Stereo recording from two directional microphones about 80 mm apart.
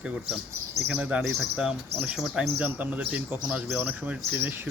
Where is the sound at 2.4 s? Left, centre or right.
Right.